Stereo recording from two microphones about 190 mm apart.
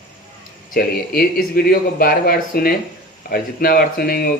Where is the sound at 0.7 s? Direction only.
50° left (ahead or behind).